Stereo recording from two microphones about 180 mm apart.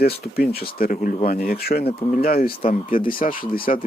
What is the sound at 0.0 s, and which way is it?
Speech, 55° left (ahead or behind).